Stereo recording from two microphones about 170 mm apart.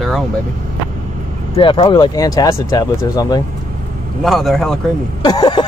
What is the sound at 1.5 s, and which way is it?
Speech, 30° left (ahead or behind).